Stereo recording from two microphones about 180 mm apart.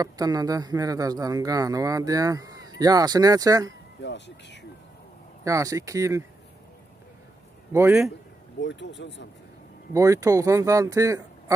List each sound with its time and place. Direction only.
0.0 s speech: 20° right (ahead or behind)
4.0 s speech: 75° left (ahead or behind)
5.4 s speech: 20° right (ahead or behind)
7.7 s speech: 10° right (ahead or behind)
8.5 s speech: 85° left
9.9 s speech: 15° right (ahead or behind)